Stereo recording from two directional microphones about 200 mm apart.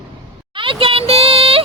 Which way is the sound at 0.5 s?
25° right (ahead or behind).